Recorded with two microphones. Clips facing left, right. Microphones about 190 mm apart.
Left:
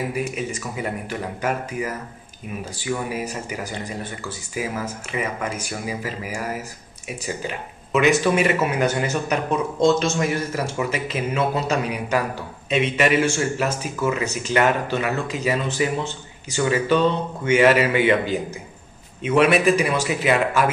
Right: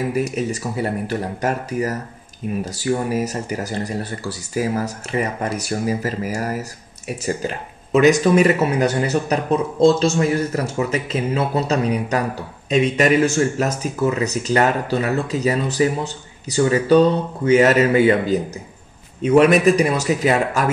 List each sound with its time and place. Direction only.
0.1 s speech: 40° right (ahead or behind)